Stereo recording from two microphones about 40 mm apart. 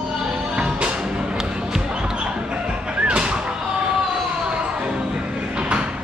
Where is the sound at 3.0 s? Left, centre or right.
Right.